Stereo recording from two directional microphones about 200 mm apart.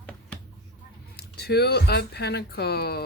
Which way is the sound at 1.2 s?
55° left (ahead or behind).